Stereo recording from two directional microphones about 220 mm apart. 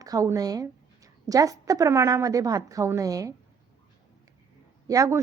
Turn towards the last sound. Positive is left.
turn(degrees=-15)  # may be behind; listen again after turning